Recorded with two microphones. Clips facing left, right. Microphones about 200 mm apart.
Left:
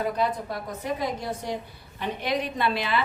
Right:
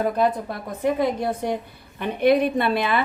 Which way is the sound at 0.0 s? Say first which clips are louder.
Right 5 dB; 55° right (ahead or behind).